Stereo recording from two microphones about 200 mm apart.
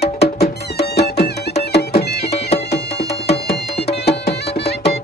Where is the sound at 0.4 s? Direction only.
55° left (ahead or behind).